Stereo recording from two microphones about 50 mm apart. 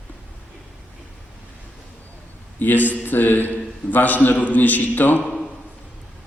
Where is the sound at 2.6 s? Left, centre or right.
Left.